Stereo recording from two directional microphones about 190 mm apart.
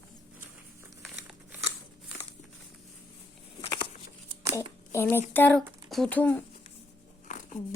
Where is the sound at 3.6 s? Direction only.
25° left (ahead or behind).